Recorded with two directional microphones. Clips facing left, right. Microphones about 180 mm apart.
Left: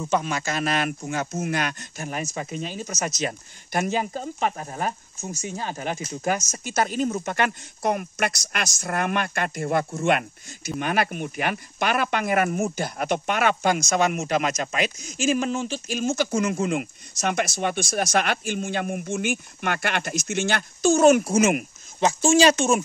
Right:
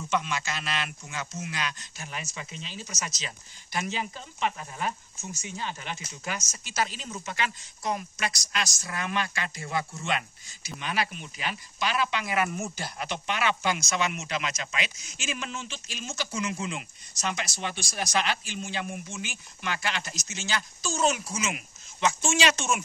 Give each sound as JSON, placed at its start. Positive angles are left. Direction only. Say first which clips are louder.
{"t": 0.1, "sound": "speech", "louder": "left 5 dB", "side_deg": 45}
{"t": 22.0, "sound": "speech", "louder": "left 8 dB", "side_deg": 35}